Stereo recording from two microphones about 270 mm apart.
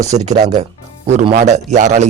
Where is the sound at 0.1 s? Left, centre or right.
Right.